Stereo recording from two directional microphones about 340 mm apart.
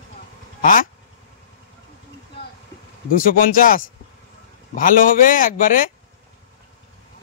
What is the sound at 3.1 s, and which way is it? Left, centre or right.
Speech, left.